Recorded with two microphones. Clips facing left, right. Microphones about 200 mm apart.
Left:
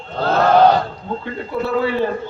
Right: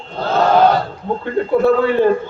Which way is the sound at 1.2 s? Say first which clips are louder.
Right 11 dB; 50° right (ahead or behind).